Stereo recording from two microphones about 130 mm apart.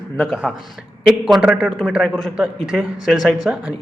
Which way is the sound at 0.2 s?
Centre (ahead or behind).